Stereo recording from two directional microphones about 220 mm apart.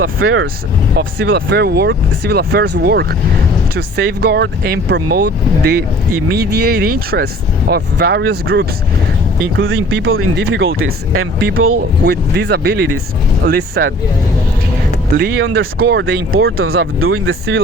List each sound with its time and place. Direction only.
0.0 s speech: 65° right (ahead or behind)
0.9 s speech: 50° right (ahead or behind); by 11.3 s 75° right (ahead or behind)
12.0 s speech: 45° right (ahead or behind)
15.2 s speech: 45° right (ahead or behind)
17.0 s speech: 70° right (ahead or behind)